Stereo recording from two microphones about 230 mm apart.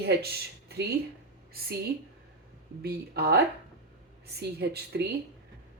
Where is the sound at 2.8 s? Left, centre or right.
Right.